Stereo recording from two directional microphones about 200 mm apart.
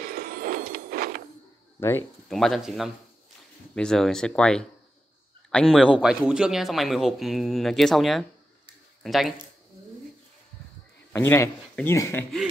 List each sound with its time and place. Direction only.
0.0 s a sound: 50° right (ahead or behind)
1.8 s speech: 10° left (ahead or behind)
2.2 s speech: centre (ahead or behind)
11.1 s speech: 15° left (ahead or behind)